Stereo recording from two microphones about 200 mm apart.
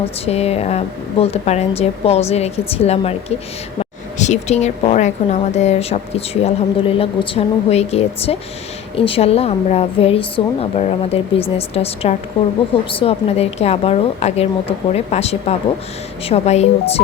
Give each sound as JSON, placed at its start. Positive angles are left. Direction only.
{"t": 0.3, "sound": "a woman's voice", "side_deg": 30}